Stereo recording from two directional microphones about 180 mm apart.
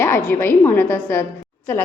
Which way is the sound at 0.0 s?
10° left (ahead or behind).